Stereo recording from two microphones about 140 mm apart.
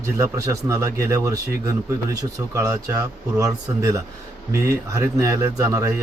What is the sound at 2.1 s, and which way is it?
A man's voice, 25° right (ahead or behind).